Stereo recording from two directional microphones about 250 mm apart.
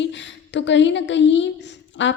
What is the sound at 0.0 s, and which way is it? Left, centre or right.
A woman's voice, left.